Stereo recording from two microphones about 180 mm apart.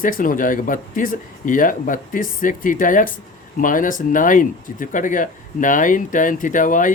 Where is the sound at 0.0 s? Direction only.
50° left (ahead or behind).